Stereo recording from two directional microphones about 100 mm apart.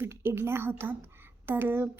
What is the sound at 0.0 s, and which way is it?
A woman's voice, 25° right (ahead or behind).